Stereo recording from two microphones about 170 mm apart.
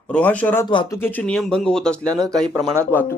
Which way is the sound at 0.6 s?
25° left (ahead or behind).